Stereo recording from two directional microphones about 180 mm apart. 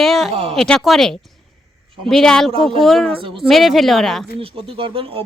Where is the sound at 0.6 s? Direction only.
5° left (ahead or behind).